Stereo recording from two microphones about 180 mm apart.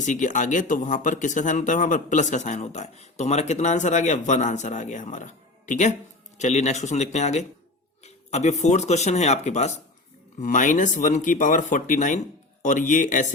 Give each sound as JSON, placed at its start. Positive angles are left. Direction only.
{"t": 0.0, "sound": "speech", "side_deg": 45}